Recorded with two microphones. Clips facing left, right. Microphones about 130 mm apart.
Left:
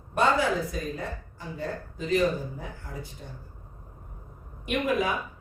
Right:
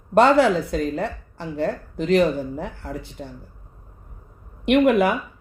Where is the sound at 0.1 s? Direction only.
75° right (ahead or behind).